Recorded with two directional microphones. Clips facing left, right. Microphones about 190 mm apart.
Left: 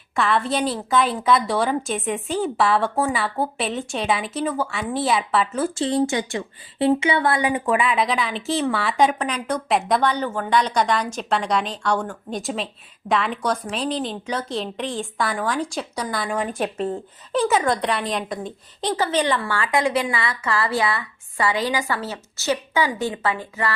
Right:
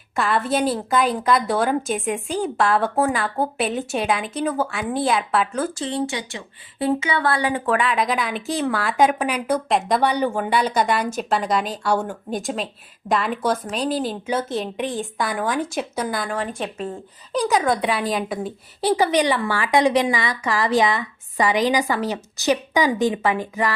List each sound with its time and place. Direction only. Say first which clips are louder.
0.2 s a woman's voice: right 1 dB; centre (ahead or behind)
5.7 s speech: left 4 dB; 35° left (ahead or behind)
6.7 s a woman's voice: left 3 dB; 25° left (ahead or behind); by 10.0 s centre (ahead or behind)
10.0 s a woman's voice: right 2 dB; 15° right (ahead or behind)
16.3 s a woman's voice: left 2 dB; 10° left (ahead or behind); by 23.7 s 15° right (ahead or behind)